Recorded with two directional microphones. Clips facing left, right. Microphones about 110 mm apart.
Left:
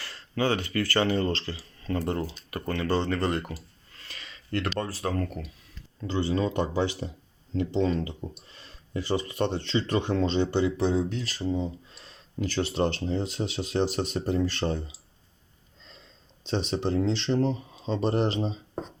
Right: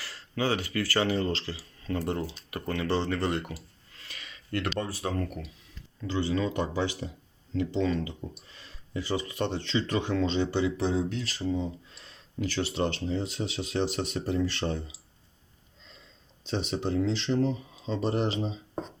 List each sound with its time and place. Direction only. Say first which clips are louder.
0.0 s speech: left 2 dB; 10° right (ahead or behind)
6.0 s speech: left 2 dB; 30° left (ahead or behind)
11.4 s speech: left 1 dB; 10° left (ahead or behind)
12.4 s speech: left 2 dB; 45° left (ahead or behind)
16.4 s speech: left 3 dB; 30° left (ahead or behind)